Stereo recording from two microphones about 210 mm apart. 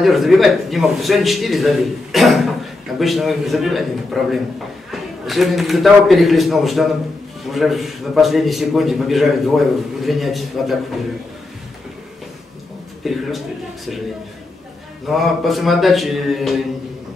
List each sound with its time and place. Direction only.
0.0 s a man's voice: centre (ahead or behind)
13.0 s a man's voice: centre (ahead or behind)
15.0 s a man's voice: centre (ahead or behind)